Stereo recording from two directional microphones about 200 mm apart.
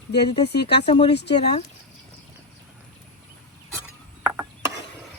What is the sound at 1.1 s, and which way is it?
Speech, 60° left (ahead or behind).